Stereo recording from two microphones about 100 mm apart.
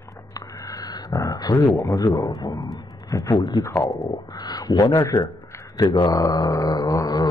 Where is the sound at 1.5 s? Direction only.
30° left (ahead or behind).